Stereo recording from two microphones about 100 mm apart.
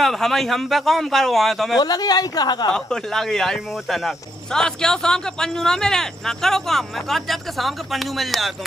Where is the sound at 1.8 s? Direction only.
40° left (ahead or behind).